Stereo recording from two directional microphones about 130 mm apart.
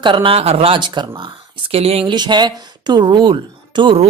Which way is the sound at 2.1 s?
35° right (ahead or behind).